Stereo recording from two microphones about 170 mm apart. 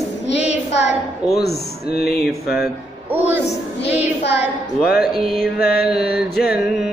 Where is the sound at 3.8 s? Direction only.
90° left.